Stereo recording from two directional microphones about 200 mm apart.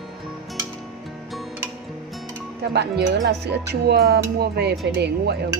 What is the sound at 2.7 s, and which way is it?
Speech, 55° right (ahead or behind).